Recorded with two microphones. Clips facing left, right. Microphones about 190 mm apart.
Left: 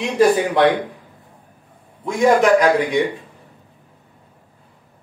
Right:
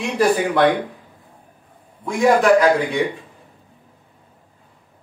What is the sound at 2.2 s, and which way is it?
Speech, 20° left (ahead or behind).